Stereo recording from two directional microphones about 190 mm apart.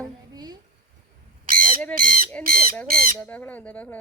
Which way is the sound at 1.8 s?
5° left (ahead or behind).